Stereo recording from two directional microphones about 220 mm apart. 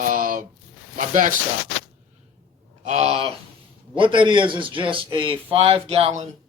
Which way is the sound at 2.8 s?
30° right (ahead or behind).